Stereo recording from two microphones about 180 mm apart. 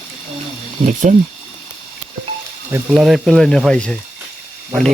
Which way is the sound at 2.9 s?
Centre (ahead or behind).